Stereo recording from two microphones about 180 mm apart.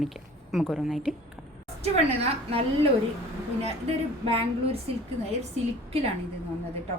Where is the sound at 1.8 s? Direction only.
35° right (ahead or behind).